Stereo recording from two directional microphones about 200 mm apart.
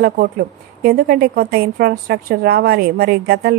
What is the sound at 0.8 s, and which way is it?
A woman's voice, 50° right (ahead or behind).